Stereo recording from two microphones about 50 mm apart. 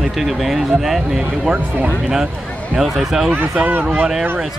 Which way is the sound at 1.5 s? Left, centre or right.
Right.